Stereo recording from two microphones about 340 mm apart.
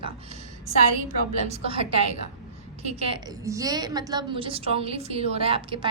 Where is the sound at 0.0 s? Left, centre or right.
Centre.